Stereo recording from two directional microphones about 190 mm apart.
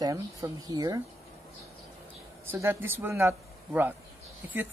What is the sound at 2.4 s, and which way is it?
Speech, 10° right (ahead or behind).